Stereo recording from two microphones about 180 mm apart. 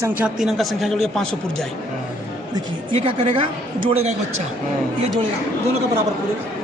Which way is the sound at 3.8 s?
35° right (ahead or behind).